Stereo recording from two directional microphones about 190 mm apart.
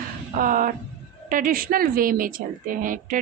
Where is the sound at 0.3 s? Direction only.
45° right (ahead or behind).